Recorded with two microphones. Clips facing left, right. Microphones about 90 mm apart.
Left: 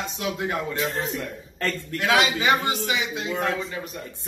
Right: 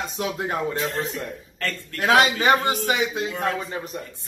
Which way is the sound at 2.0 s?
45° right (ahead or behind).